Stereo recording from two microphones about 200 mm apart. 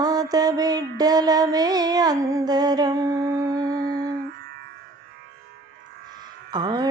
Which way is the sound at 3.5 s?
20° right (ahead or behind).